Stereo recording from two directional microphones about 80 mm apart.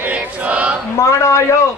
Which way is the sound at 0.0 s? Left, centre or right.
Centre.